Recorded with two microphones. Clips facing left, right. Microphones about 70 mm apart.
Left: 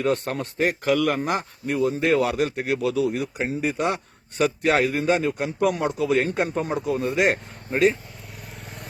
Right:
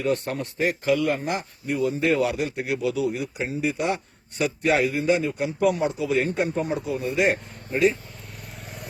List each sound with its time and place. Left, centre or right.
0.0 s speech: left
3.3 s a man's voice: left
5.6 s speech: left